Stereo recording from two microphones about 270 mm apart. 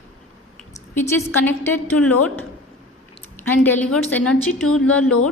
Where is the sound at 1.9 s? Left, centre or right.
Left.